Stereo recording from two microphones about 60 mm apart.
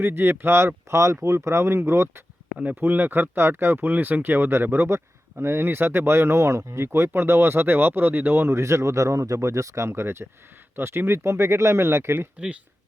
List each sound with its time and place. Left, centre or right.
0.0 s speech: right
0.9 s speech: right
2.6 s speech: right
9.9 s speech: right
12.4 s speech: centre